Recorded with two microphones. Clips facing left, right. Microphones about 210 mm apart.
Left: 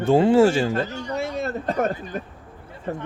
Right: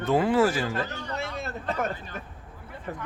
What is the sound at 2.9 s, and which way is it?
Speech, 30° left (ahead or behind).